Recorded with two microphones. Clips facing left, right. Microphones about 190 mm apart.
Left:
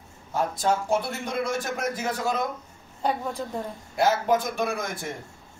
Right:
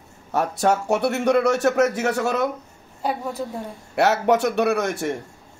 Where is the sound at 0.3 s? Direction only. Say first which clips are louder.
Right 4 dB; 70° right (ahead or behind).